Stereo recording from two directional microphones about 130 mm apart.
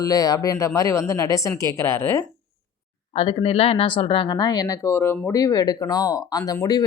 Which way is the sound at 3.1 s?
50° left (ahead or behind).